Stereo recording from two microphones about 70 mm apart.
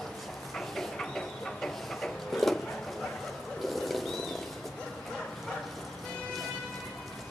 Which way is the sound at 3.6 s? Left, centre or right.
Centre.